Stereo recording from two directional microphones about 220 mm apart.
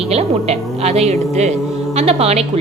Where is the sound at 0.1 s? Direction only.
30° right (ahead or behind).